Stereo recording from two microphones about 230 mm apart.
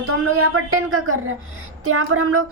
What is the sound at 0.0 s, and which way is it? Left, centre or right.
Speech, right.